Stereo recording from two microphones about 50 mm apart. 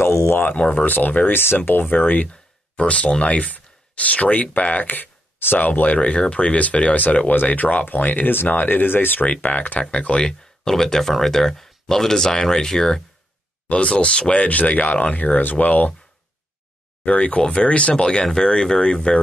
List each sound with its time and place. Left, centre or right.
0.3 s speech: left
0.6 s speech: left
0.8 s speech: left
2.7 s speech: left
9.8 s speech: left; by 13.0 s centre
13.7 s speech: left
17.0 s speech: left